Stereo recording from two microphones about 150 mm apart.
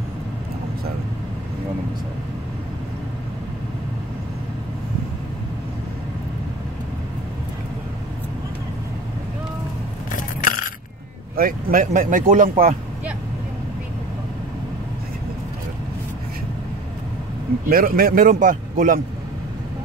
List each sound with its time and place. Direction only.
10.1 s coin: 65° left (ahead or behind)
11.3 s speech: 70° right (ahead or behind)
17.6 s a man's voice: 75° right (ahead or behind)